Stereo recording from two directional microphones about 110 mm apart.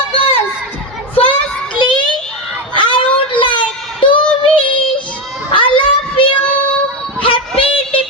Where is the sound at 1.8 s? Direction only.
50° left (ahead or behind).